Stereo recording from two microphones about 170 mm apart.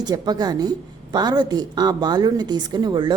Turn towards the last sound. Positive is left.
turn(degrees=-25)  # may be behind; listen again after turning